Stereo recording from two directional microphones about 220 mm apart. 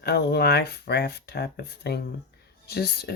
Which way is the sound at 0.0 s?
45° left (ahead or behind).